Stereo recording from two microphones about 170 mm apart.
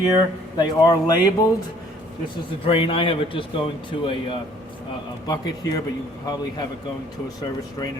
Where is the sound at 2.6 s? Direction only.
30° left (ahead or behind).